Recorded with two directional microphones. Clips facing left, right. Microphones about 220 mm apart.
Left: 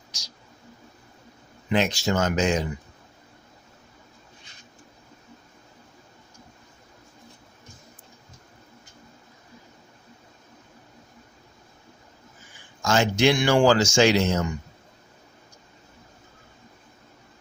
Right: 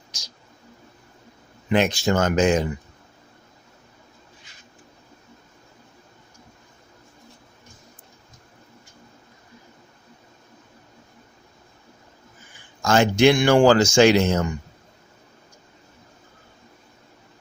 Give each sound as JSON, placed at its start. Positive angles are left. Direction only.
{"t": 1.7, "sound": "speech", "side_deg": -55}
{"t": 12.8, "sound": "speech", "side_deg": -55}